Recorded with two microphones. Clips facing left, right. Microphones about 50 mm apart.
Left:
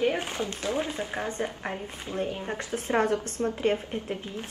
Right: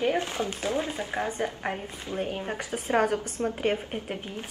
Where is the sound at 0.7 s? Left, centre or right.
Right.